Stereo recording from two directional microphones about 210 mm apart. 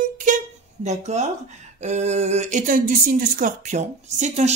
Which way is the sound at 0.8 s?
35° right (ahead or behind).